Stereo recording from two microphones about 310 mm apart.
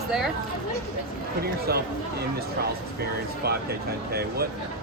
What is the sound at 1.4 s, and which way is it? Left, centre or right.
Speech, right.